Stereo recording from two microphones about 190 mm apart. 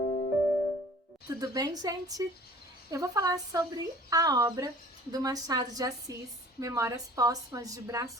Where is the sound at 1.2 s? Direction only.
20° right (ahead or behind).